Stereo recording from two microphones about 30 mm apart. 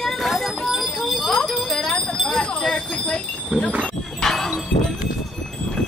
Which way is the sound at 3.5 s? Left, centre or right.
Right.